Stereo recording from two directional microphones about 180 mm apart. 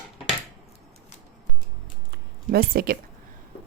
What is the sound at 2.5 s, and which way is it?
Speech, 55° right (ahead or behind).